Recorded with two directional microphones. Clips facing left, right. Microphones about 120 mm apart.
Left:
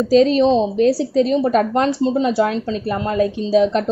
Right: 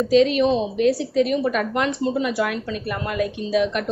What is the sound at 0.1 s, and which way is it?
A woman's voice, 35° left (ahead or behind).